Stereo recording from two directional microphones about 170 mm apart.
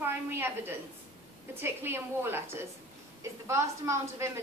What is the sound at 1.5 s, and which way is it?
A woman's voice, 15° right (ahead or behind).